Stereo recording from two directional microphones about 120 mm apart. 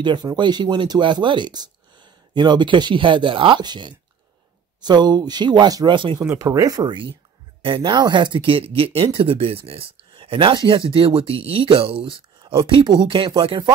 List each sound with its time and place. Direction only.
0.0 s speech: 40° right (ahead or behind)
6.3 s speech: 25° right (ahead or behind)